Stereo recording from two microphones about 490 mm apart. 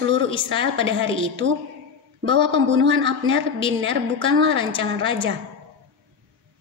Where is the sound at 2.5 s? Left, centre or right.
Right.